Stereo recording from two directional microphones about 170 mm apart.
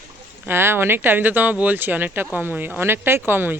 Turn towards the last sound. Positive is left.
turn(degrees=-10)  # may be behind; listen again after turning